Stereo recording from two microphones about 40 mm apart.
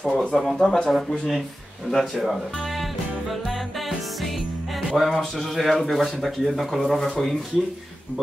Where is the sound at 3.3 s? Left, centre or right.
Centre.